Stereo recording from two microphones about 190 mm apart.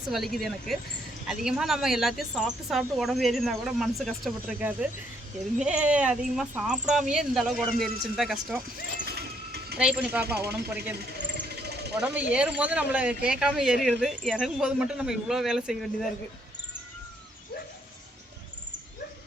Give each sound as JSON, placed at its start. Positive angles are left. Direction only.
{"t": 0.1, "sound": "speech", "side_deg": 0}
{"t": 9.0, "sound": "a sound", "side_deg": -55}
{"t": 9.7, "sound": "speech", "side_deg": -5}
{"t": 10.5, "sound": "speech", "side_deg": -55}
{"t": 11.4, "sound": "a sound", "side_deg": -60}
{"t": 11.9, "sound": "speech", "side_deg": -5}